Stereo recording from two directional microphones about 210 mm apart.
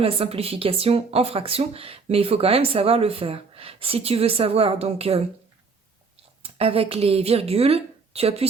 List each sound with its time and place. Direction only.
0.0 s speech: 25° right (ahead or behind)
6.4 s a woman's voice: 25° right (ahead or behind)